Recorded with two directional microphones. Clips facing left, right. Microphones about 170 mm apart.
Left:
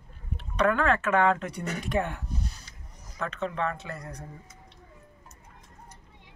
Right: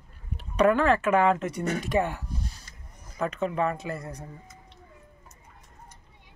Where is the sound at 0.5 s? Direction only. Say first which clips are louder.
Right 3 dB; 5° right (ahead or behind).